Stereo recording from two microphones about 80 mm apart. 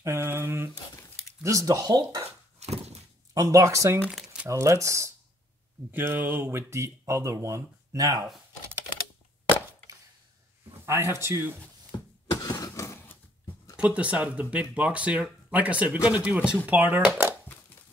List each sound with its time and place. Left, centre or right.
0.0 s a sound: right
0.9 s a sound: left
1.4 s speech: right
3.3 s speech: right
4.1 s crumpling: centre
4.5 s speech: right
5.9 s speech: right
6.4 s speech: right
10.9 s speech: right
12.4 s a sound: left
13.0 s a sound: left
13.7 s speech: centre; by 17.4 s right